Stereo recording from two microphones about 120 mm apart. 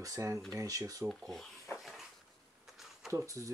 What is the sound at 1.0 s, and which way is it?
Rub, centre (ahead or behind).